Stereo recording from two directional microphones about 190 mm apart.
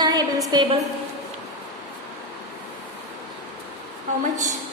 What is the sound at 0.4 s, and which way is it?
Speech, 20° right (ahead or behind).